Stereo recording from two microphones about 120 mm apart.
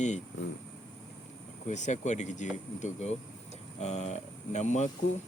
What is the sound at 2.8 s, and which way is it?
Speech, 70° left (ahead or behind).